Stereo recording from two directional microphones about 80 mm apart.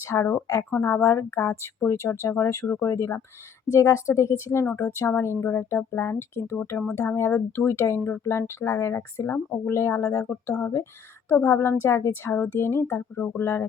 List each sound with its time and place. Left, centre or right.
0.1 s speech: left